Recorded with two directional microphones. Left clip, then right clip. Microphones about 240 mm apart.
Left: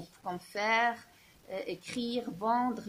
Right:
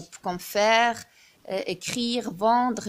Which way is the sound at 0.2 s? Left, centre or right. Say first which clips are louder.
Right 11 dB; right.